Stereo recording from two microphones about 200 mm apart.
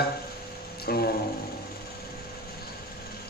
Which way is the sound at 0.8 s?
50° left (ahead or behind).